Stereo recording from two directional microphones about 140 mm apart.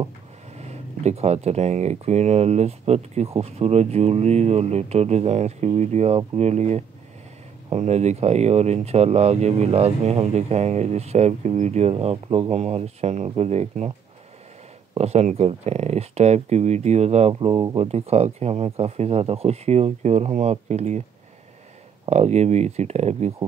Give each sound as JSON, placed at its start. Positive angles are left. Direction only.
{"t": 0.6, "sound": "speech", "side_deg": -50}
{"t": 15.0, "sound": "speech", "side_deg": -50}
{"t": 17.3, "sound": "speech", "side_deg": -35}
{"t": 17.7, "sound": "speech", "side_deg": -45}
{"t": 22.1, "sound": "speech", "side_deg": -50}